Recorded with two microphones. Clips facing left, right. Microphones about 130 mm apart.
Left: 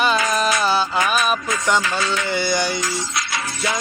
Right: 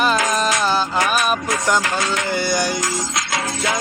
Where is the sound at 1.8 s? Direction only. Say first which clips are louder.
Right 1 dB; 85° right.